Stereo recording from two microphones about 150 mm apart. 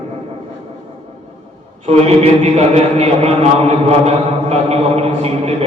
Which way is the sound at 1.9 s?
45° right (ahead or behind).